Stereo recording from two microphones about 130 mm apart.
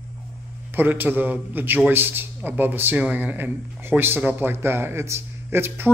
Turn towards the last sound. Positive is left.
turn(degrees=-15)  # may be behind; listen again after turning